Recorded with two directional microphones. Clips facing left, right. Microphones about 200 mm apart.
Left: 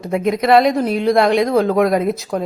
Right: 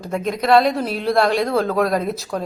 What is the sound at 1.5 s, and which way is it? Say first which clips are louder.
Speech: left 4 dB; 15° left (ahead or behind).